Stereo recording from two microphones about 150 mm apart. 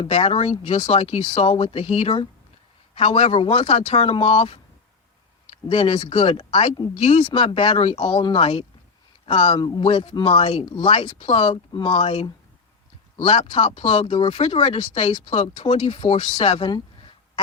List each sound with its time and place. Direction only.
0.0 s speech: 35° left (ahead or behind)